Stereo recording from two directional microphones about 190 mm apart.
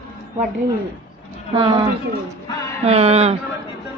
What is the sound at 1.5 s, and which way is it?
A woman's voice, 25° right (ahead or behind).